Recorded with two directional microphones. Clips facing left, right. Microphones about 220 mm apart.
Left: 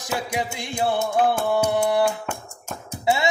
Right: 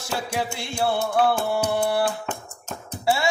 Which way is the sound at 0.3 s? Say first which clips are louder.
Even; 15° left (ahead or behind).